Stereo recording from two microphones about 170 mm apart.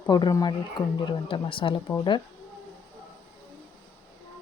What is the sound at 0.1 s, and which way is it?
Speech, 25° left (ahead or behind).